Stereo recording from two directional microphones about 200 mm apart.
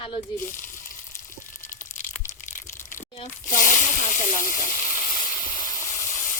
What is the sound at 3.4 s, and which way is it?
Speech, 40° left (ahead or behind).